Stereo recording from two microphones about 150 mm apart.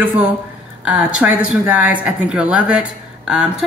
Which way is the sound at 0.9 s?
10° right (ahead or behind).